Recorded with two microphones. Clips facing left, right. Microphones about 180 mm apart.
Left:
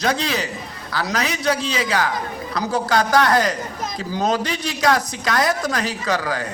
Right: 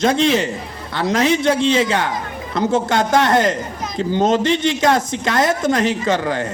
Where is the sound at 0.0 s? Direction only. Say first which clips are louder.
Right 6 dB; 25° right (ahead or behind).